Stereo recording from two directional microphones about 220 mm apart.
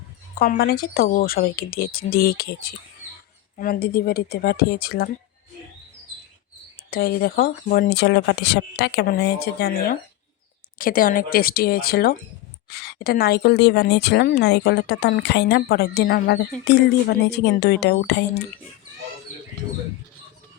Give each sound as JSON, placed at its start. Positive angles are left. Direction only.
{"t": 0.3, "sound": "a woman's voice", "side_deg": 40}
{"t": 6.9, "sound": "a woman's voice", "side_deg": 40}